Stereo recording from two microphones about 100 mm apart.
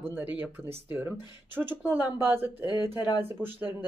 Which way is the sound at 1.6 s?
10° right (ahead or behind).